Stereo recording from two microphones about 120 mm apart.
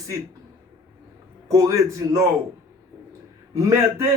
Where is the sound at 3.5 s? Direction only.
25° right (ahead or behind).